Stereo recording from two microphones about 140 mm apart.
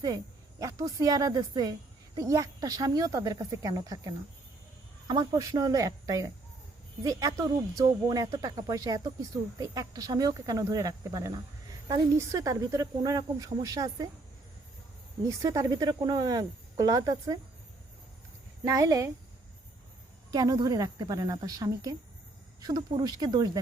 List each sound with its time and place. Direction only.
0.6 s speech: 25° right (ahead or behind)
15.3 s speech: 25° right (ahead or behind)
18.6 s speech: 25° right (ahead or behind)
20.3 s speech: 30° right (ahead or behind)